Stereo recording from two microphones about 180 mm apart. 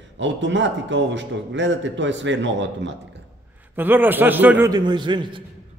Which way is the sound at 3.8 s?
10° right (ahead or behind).